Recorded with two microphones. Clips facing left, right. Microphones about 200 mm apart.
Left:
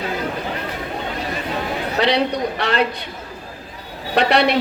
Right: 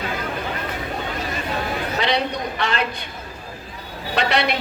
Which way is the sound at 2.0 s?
35° left (ahead or behind).